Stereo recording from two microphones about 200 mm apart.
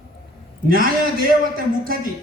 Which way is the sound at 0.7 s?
45° right (ahead or behind).